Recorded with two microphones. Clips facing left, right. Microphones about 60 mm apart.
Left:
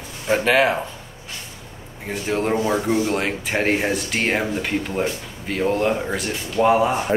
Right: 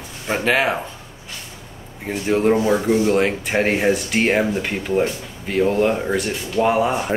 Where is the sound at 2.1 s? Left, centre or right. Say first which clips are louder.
Right 4 dB; centre.